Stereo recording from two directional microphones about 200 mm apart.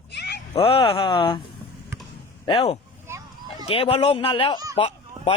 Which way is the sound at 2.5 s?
30° left (ahead or behind).